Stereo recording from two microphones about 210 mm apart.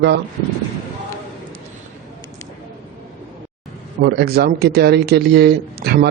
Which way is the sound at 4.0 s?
50° right (ahead or behind).